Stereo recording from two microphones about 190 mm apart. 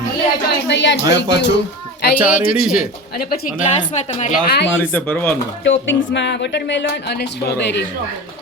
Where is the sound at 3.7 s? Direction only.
35° left (ahead or behind).